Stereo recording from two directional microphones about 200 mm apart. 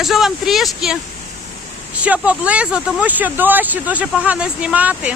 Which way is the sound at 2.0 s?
5° right (ahead or behind).